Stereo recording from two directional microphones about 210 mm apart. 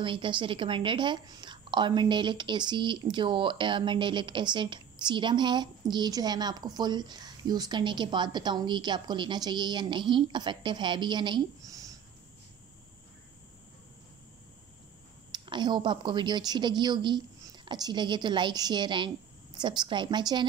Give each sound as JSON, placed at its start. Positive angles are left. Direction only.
{"t": 0.0, "sound": "a woman's voice", "side_deg": -25}
{"t": 15.3, "sound": "a woman's voice", "side_deg": -20}